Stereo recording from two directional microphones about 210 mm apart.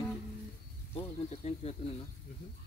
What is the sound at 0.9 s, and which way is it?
Speech, 30° left (ahead or behind).